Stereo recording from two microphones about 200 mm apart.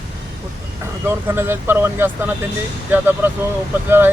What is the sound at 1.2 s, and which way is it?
Speech, 10° right (ahead or behind).